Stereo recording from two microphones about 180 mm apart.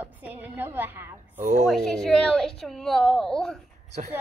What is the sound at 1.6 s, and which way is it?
A woman's voice, centre (ahead or behind).